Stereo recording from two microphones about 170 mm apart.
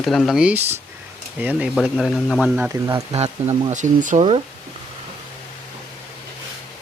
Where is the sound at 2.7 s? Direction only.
20° right (ahead or behind).